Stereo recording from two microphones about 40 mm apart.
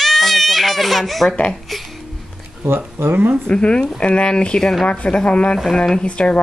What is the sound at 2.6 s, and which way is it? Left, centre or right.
Speech, right.